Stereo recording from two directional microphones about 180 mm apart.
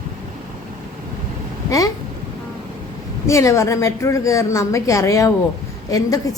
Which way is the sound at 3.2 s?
15° left (ahead or behind).